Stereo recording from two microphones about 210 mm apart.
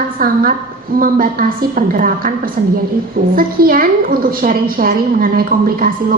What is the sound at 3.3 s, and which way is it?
A woman's voice, 45° right (ahead or behind).